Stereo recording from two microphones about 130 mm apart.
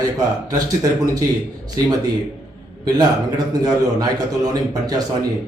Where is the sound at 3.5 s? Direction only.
30° right (ahead or behind).